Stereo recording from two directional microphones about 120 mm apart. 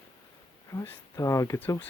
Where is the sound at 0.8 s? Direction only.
20° left (ahead or behind).